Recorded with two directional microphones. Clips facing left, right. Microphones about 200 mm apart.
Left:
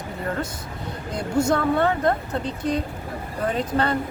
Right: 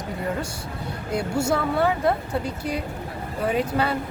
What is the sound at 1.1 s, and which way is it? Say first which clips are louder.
Speech: left 2 dB; 10° right (ahead or behind).